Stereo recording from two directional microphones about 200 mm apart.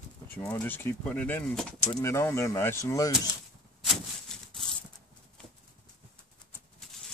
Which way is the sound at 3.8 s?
Centre (ahead or behind).